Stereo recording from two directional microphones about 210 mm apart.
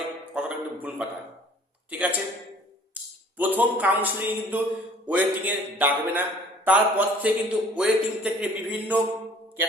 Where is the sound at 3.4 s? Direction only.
10° right (ahead or behind).